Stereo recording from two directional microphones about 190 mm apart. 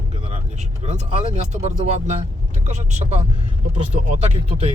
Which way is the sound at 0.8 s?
35° right (ahead or behind).